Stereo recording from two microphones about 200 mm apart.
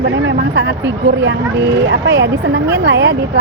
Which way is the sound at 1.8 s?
60° right (ahead or behind).